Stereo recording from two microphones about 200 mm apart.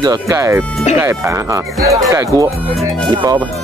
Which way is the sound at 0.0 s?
15° right (ahead or behind).